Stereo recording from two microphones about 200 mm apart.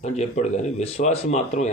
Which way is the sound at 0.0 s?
35° left (ahead or behind).